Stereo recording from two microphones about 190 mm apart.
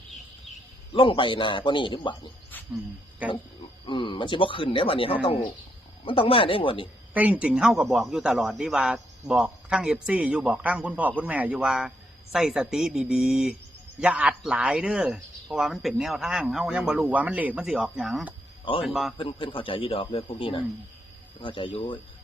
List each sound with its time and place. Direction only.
0.9 s speech: 25° left (ahead or behind)
3.2 s pig: 5° right (ahead or behind)
3.8 s speech: 25° left (ahead or behind)
7.1 s speech: 10° right (ahead or behind)
19.1 s speech: 25° left (ahead or behind)